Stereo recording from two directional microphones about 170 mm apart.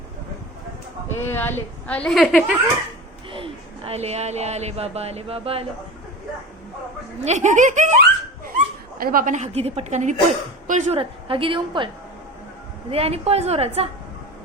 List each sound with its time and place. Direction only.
1.0 s speech: 15° left (ahead or behind)
3.3 s speech: 35° right (ahead or behind)
7.3 s giggle: 45° right (ahead or behind)
8.5 s a woman's voice: 60° right (ahead or behind); by 11.9 s 30° right (ahead or behind)
12.9 s a woman's voice: 35° right (ahead or behind)